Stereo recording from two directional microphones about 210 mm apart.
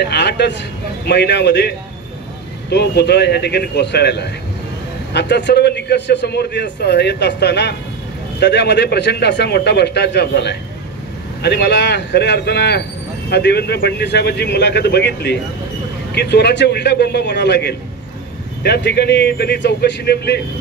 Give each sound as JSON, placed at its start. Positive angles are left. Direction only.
{"t": 0.0, "sound": "a man's voice", "side_deg": 50}
{"t": 2.7, "sound": "a man's voice", "side_deg": 50}